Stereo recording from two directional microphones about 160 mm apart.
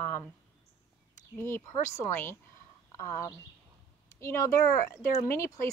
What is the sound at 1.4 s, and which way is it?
Speech, 15° left (ahead or behind).